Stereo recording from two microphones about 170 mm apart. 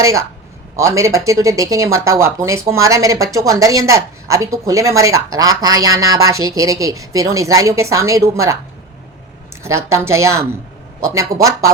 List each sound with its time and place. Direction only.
0.0 s speech: 20° right (ahead or behind)
9.6 s speech: 15° right (ahead or behind)